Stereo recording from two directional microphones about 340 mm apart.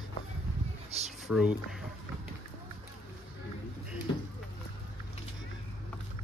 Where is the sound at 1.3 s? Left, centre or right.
Centre.